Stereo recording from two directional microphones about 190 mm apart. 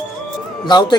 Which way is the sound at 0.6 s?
20° left (ahead or behind).